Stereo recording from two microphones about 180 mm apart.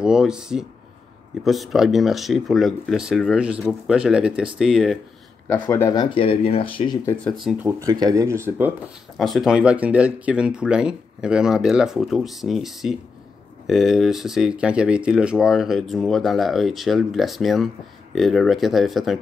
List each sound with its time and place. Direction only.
0.0 s speech: 5° right (ahead or behind)
5.5 s speech: 15° left (ahead or behind); by 7.0 s 30° left (ahead or behind)
7.4 s speech: 10° right (ahead or behind)
9.2 s speech: centre (ahead or behind)